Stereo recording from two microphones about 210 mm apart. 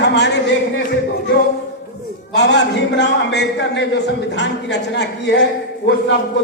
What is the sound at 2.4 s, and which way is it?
A man's voice, 55° left (ahead or behind).